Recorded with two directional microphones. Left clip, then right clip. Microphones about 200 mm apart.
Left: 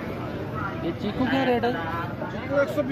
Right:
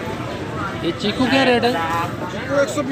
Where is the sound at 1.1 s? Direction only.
10° right (ahead or behind).